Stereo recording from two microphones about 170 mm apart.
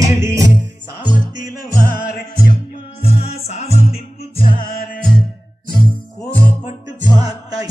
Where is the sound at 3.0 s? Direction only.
35° left (ahead or behind).